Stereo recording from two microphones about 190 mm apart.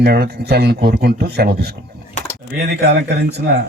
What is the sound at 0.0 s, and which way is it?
A man's voice, 55° right (ahead or behind).